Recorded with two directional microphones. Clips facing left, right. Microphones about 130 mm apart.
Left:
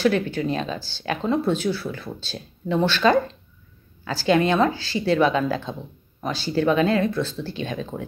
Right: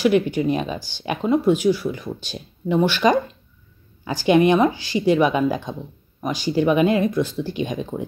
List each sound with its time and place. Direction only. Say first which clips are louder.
0.0 s speech: right 3 dB; 15° right (ahead or behind)